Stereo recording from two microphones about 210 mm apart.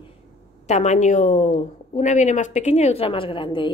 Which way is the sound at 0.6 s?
35° left (ahead or behind).